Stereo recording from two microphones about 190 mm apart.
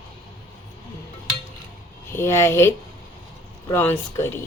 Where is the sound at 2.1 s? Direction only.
15° left (ahead or behind).